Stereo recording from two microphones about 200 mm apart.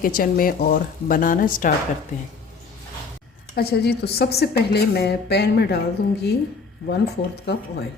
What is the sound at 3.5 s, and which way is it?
Speech, 55° left (ahead or behind).